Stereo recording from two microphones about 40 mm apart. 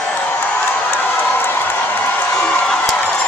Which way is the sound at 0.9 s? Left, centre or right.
Left.